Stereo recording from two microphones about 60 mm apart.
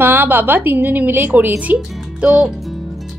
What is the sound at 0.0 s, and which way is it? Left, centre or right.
A woman's voice, right.